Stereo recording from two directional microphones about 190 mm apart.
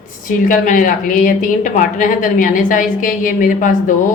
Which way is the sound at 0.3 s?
45° left (ahead or behind).